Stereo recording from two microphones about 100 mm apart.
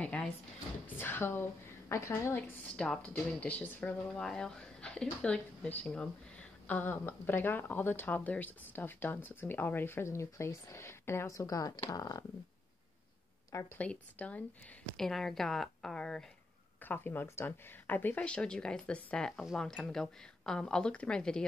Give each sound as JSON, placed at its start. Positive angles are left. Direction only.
{"t": 0.0, "sound": "drawer open or close", "side_deg": 10}
{"t": 0.8, "sound": "speech", "side_deg": 20}
{"t": 2.6, "sound": "speech", "side_deg": 10}
{"t": 4.1, "sound": "speech", "side_deg": 5}
{"t": 13.7, "sound": "speech", "side_deg": 15}
{"t": 15.0, "sound": "speech", "side_deg": 5}
{"t": 16.8, "sound": "speech", "side_deg": 20}